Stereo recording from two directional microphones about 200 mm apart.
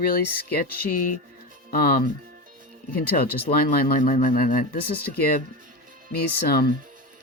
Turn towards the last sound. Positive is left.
turn(degrees=50)  # may be behind; listen again after turning